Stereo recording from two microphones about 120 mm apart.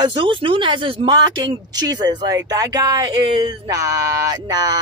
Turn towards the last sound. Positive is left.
turn(degrees=-30)  # may be behind; listen again after turning